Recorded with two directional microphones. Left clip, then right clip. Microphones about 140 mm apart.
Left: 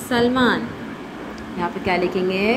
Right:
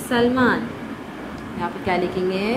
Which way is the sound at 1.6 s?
20° left (ahead or behind).